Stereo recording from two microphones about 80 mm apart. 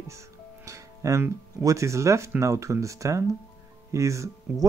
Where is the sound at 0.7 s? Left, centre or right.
Right.